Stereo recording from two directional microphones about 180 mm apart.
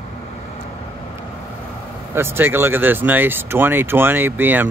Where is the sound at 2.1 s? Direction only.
10° right (ahead or behind).